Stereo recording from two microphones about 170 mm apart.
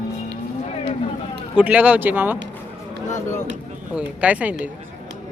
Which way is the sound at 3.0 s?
45° left (ahead or behind).